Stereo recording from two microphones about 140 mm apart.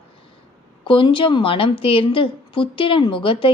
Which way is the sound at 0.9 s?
35° left (ahead or behind).